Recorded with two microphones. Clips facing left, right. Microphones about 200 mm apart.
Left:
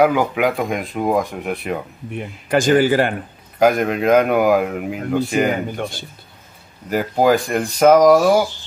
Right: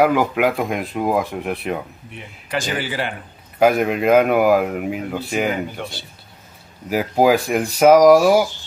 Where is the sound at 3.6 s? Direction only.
Centre (ahead or behind).